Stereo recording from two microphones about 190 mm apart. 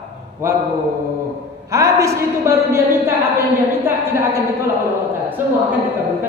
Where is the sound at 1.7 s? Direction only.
15° right (ahead or behind).